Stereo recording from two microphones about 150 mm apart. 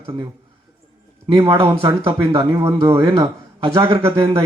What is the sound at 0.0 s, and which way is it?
Speech, 35° right (ahead or behind).